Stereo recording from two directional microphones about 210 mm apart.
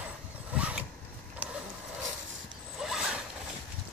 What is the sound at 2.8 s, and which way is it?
Zipper, centre (ahead or behind).